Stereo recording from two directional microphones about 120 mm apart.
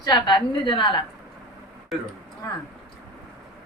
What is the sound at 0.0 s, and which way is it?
Speech, 35° left (ahead or behind).